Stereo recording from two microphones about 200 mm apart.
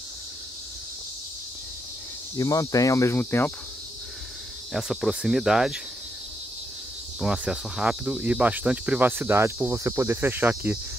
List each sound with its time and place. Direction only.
2.3 s speech: 15° left (ahead or behind)
4.7 s speech: centre (ahead or behind)
7.2 s speech: 5° right (ahead or behind)